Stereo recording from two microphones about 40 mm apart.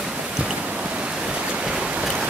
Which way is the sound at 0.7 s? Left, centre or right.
Right.